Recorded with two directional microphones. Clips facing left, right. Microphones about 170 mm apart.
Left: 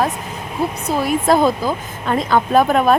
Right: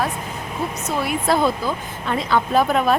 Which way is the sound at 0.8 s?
40° left (ahead or behind).